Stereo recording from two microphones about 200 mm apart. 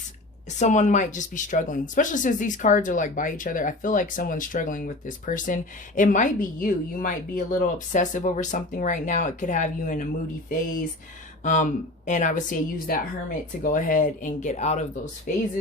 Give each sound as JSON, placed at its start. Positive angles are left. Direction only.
{"t": 0.6, "sound": "speech", "side_deg": 35}
{"t": 11.4, "sound": "speech", "side_deg": 40}